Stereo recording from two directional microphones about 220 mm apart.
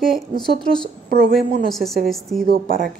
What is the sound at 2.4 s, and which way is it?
Speech, 45° right (ahead or behind).